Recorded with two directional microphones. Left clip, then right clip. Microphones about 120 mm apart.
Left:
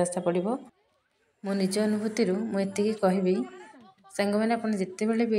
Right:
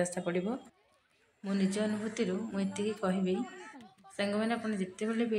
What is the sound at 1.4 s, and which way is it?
A woman's voice, 55° left (ahead or behind).